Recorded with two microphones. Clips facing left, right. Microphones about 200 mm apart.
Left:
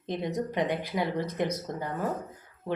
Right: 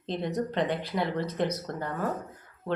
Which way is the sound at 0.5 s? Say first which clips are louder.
Even; 15° left (ahead or behind).